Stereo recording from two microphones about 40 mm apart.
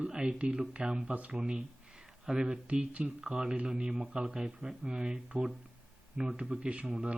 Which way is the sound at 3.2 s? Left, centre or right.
Centre.